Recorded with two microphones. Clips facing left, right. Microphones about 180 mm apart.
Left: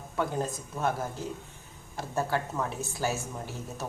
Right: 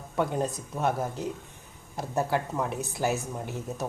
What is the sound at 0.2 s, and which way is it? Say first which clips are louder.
Speech: right 3 dB; 20° right (ahead or behind).